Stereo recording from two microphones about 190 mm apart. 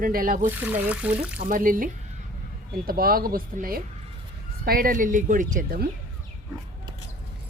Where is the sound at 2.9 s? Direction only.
50° right (ahead or behind).